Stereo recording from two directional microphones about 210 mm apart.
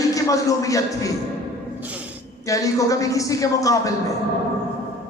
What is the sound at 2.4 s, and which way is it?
A man's voice, 15° left (ahead or behind).